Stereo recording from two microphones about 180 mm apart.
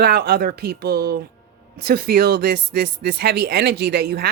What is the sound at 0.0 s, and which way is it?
Speech, 60° right (ahead or behind).